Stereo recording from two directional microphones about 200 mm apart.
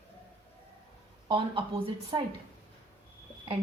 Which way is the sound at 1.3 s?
25° right (ahead or behind).